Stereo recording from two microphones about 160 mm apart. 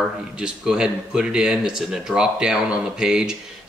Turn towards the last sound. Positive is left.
turn(degrees=-5)  # may be behind; listen again after turning